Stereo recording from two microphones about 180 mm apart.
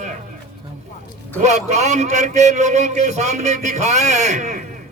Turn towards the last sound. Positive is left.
turn(degrees=-40)  # may be behind; listen again after turning